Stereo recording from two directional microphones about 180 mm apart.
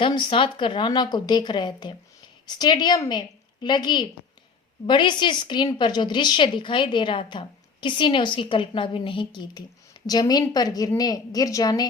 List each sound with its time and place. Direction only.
0.0 s a woman's voice: 30° left (ahead or behind)